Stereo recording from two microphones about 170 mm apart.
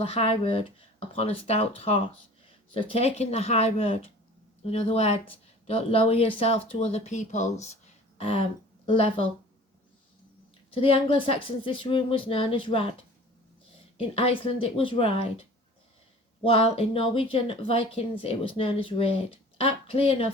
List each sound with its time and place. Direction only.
0.0 s speech: 35° left (ahead or behind)
8.2 s speech: 35° left (ahead or behind)
10.7 s speech: 35° left (ahead or behind)
14.1 s speech: 35° left (ahead or behind)